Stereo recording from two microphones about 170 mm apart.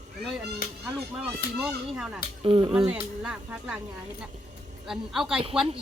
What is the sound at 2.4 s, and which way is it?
Speech, 30° right (ahead or behind).